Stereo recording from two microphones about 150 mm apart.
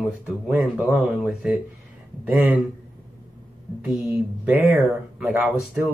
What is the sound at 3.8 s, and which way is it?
Speech, 15° right (ahead or behind).